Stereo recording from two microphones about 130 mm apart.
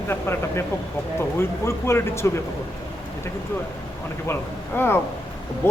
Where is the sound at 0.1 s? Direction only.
20° left (ahead or behind).